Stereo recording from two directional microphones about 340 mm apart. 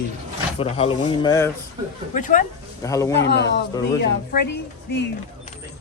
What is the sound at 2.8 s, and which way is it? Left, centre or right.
Speech, centre.